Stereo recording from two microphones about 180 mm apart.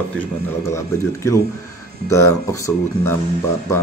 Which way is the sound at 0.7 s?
15° left (ahead or behind).